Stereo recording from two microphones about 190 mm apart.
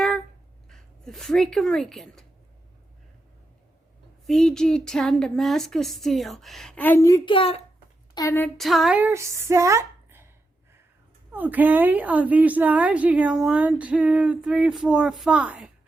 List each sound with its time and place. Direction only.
0.7 s speech: centre (ahead or behind)
4.3 s speech: 5° left (ahead or behind); by 7.6 s 30° left (ahead or behind)
8.1 s a woman's voice: 15° left (ahead or behind)
8.5 s speech: centre (ahead or behind)
11.3 s a woman's voice: 10° right (ahead or behind)